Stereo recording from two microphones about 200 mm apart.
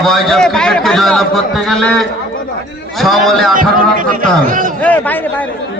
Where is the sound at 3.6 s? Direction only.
45° right (ahead or behind).